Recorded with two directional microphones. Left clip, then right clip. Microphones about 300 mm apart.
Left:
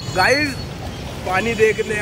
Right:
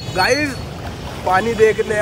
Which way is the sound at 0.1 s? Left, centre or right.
Centre.